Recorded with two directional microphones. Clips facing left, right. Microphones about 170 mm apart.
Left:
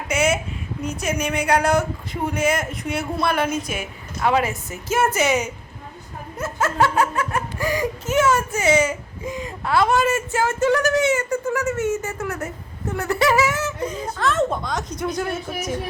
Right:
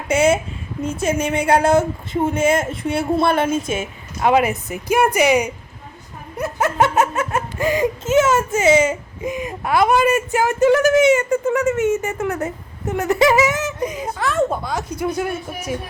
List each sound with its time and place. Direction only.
0.1 s a woman's voice: 30° right (ahead or behind); by 15.4 s 10° right (ahead or behind)